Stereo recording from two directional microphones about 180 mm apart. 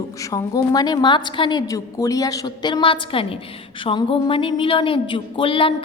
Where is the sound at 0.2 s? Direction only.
20° left (ahead or behind).